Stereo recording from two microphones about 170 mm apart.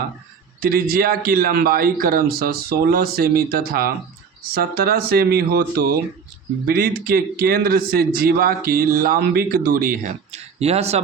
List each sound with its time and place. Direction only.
0.6 s a man's voice: 60° right (ahead or behind)
10.6 s speech: 40° right (ahead or behind)